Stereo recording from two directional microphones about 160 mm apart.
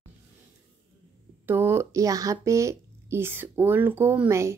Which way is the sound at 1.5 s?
15° right (ahead or behind).